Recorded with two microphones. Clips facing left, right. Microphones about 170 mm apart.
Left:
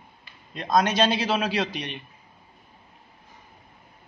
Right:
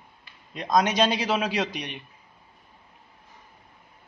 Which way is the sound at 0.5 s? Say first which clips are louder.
Even; 15° right (ahead or behind).